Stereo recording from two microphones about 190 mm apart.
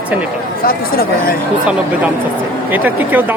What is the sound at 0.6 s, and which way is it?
Speech, 50° left (ahead or behind).